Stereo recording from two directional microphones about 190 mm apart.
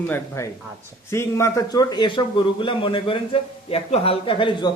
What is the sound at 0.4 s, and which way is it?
A man's voice, 15° left (ahead or behind).